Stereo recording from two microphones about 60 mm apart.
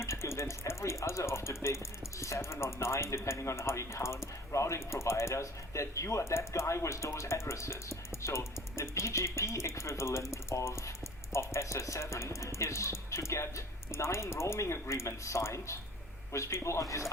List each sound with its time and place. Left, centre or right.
0.0 s speech: left